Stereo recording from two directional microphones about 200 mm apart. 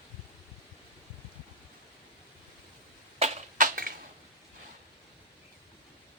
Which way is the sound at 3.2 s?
35° right (ahead or behind).